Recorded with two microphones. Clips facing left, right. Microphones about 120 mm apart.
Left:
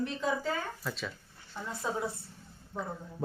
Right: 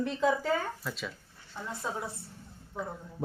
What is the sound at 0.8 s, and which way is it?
Speech, 5° right (ahead or behind).